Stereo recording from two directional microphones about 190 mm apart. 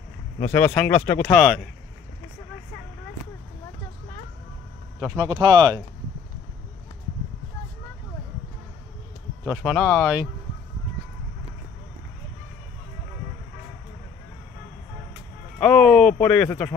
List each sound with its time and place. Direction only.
0.4 s speech: 10° left (ahead or behind)
1.4 s speech: centre (ahead or behind)
5.1 s speech: 20° right (ahead or behind)
9.4 s speech: 5° right (ahead or behind)
9.8 s speech: 5° left (ahead or behind)
15.6 s speech: 5° left (ahead or behind)